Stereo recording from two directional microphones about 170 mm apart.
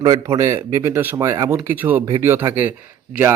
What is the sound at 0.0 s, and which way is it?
Speech, 25° right (ahead or behind).